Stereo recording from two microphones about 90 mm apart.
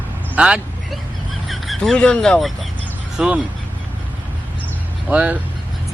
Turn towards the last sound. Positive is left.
turn(degrees=-15)  # may be behind; listen again after turning